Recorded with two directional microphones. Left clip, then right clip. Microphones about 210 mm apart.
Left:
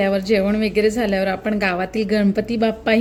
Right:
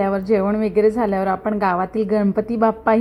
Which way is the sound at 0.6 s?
30° right (ahead or behind).